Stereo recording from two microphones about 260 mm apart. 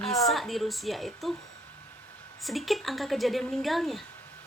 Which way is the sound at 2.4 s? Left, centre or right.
Centre.